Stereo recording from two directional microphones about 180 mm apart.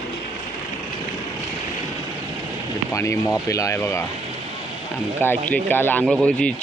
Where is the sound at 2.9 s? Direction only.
15° left (ahead or behind).